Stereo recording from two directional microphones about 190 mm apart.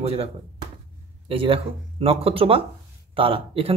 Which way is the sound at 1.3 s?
30° right (ahead or behind).